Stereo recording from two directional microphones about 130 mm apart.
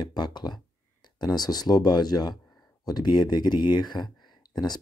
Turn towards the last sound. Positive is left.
turn(degrees=35)  # may be behind; listen again after turning